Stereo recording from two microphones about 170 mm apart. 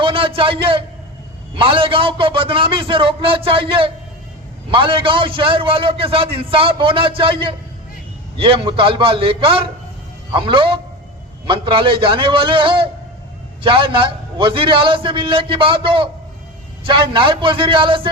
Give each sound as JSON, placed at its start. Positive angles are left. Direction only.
{"t": 0.0, "sound": "a man's voice", "side_deg": -30}